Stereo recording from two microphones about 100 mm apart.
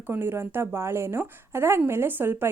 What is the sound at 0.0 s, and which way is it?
A woman's voice, 20° right (ahead or behind).